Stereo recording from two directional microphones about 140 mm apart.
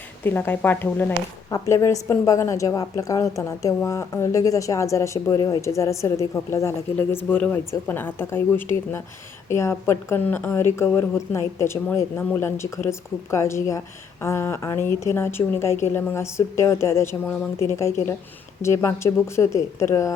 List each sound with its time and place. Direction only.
0.3 s a woman's voice: 15° left (ahead or behind)